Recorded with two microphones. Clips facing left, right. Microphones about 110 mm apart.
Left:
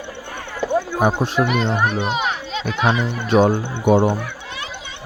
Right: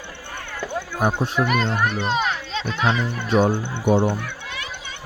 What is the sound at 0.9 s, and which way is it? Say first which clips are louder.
Speech: left 4 dB; 90° left.